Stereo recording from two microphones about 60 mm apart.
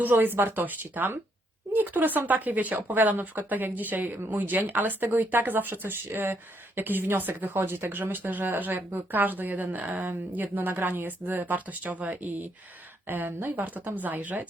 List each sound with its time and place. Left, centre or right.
0.0 s speech: right